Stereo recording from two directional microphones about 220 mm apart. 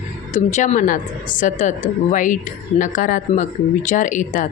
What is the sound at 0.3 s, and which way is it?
A woman's voice, 35° left (ahead or behind).